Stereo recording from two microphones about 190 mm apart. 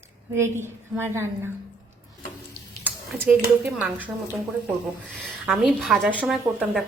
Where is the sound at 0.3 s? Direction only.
15° right (ahead or behind).